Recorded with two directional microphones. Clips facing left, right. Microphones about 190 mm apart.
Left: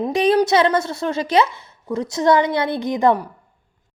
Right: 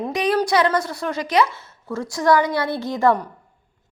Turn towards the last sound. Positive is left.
turn(degrees=15)  # may be behind; listen again after turning